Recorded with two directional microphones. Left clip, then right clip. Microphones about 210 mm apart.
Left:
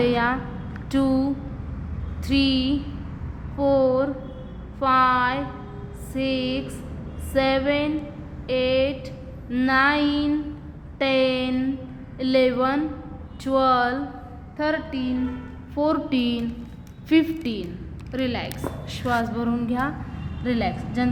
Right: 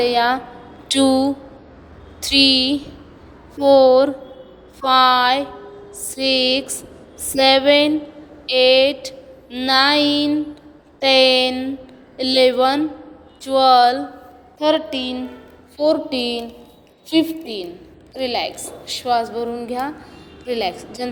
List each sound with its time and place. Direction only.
0.0 s a woman's voice: 15° right (ahead or behind)
0.9 s a woman's voice: 30° right (ahead or behind)
15.7 s a woman's voice: 15° right (ahead or behind)